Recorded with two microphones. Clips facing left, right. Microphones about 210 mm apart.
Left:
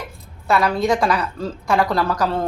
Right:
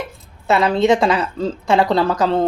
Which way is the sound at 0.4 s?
25° right (ahead or behind).